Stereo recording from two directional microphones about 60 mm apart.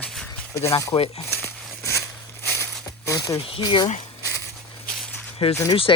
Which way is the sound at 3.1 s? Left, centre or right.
Left.